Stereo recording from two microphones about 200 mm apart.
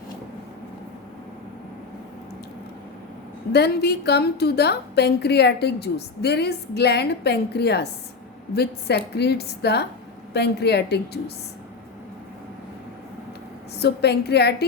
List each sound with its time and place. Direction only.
3.5 s a woman's voice: 55° left (ahead or behind)
13.7 s a woman's voice: 55° left (ahead or behind)